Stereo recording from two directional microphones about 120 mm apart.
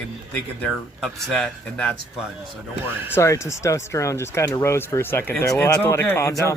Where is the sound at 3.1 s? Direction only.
25° left (ahead or behind).